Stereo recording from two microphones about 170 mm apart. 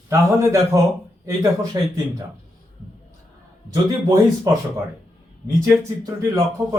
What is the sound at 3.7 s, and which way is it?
Speech, 25° right (ahead or behind).